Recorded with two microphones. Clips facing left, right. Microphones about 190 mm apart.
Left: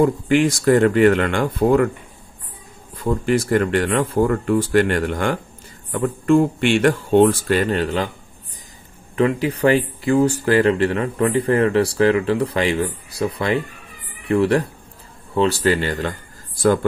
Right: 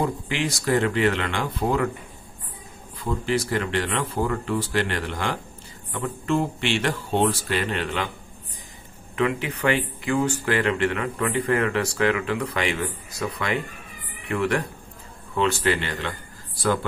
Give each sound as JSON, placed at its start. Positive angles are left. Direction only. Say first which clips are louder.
{"t": 0.0, "sound": "speech", "louder": "left 10 dB", "side_deg": 50}
{"t": 3.0, "sound": "speech", "louder": "left 6 dB", "side_deg": 50}
{"t": 9.1, "sound": "speech", "louder": "left 6 dB", "side_deg": 35}